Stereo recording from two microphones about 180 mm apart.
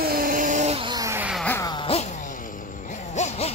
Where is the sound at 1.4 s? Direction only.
10° left (ahead or behind).